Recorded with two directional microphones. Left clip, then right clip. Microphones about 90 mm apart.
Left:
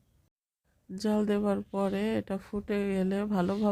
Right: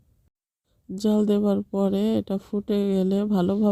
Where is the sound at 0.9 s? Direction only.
35° right (ahead or behind).